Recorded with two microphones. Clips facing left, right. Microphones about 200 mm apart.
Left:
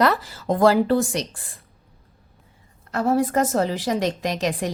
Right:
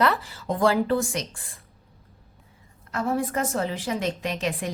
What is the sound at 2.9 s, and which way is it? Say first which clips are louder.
A woman's voice: left 6 dB; 40° left (ahead or behind).